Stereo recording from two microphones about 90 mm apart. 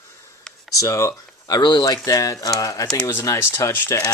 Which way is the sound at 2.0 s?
40° left (ahead or behind).